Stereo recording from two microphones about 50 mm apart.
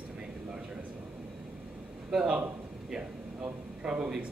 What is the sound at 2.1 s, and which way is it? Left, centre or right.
Speech, centre.